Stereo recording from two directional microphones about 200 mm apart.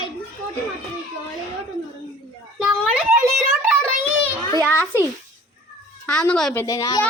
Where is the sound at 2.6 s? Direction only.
5° right (ahead or behind).